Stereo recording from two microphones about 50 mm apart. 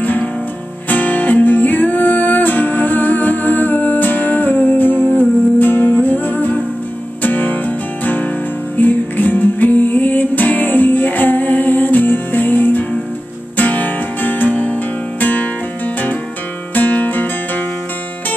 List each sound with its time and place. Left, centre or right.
0.0 s music: left
16.7 s music: left